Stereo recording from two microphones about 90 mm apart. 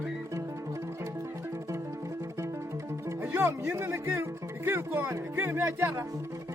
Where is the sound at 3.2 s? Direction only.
25° right (ahead or behind).